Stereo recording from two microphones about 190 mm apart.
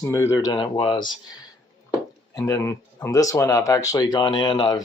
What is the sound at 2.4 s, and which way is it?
Speech, 15° left (ahead or behind).